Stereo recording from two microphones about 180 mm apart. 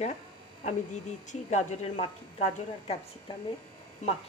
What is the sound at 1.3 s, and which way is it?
A woman's voice, 40° left (ahead or behind).